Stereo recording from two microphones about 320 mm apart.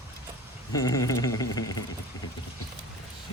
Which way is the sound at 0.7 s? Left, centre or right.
Centre.